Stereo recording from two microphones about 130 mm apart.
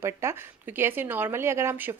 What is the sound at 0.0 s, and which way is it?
A woman's voice, 20° right (ahead or behind).